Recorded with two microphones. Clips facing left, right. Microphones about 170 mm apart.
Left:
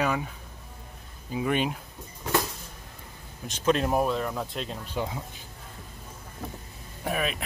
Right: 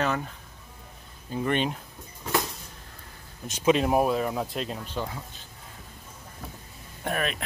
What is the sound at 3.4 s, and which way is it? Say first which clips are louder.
Speech: right 2 dB; 5° right (ahead or behind).